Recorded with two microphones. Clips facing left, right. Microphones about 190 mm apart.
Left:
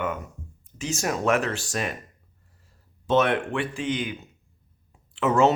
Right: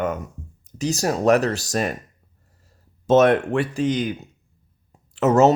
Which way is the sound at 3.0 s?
40° right (ahead or behind).